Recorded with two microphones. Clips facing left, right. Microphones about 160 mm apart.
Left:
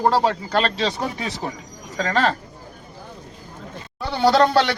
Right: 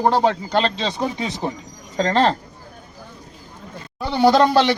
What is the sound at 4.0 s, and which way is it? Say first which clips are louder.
Speech: right 2 dB; 20° right (ahead or behind).